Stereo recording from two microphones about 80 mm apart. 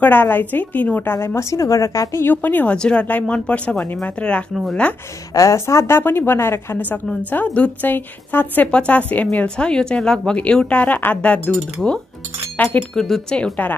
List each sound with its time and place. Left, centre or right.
0.0 s a woman's voice: left
1.1 s a woman's voice: left
2.2 s speech: left
5.3 s a woman's voice: left
12.9 s speech: centre